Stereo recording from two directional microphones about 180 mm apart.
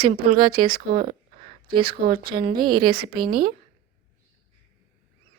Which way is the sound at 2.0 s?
30° right (ahead or behind).